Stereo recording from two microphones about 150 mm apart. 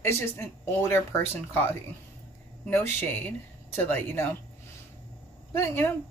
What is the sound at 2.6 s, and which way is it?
Speech, 15° left (ahead or behind).